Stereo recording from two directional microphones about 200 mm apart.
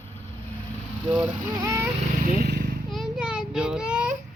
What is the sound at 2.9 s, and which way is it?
Child singing, centre (ahead or behind).